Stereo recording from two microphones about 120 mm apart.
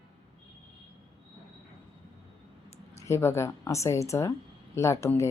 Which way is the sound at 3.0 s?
25° left (ahead or behind).